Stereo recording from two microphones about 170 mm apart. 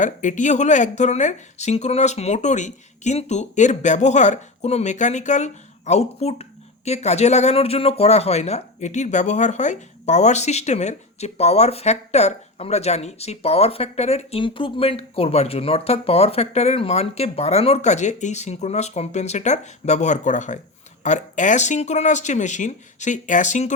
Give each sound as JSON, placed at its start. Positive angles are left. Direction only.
{"t": 0.0, "sound": "speech", "side_deg": 45}